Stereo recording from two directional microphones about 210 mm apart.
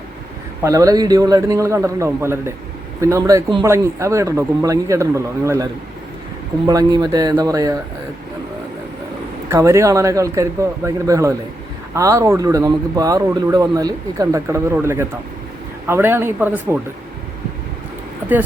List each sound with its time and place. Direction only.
0.6 s speech: 15° right (ahead or behind)
6.7 s speech: 20° right (ahead or behind)
9.5 s speech: 15° right (ahead or behind)
18.2 s speech: 10° right (ahead or behind)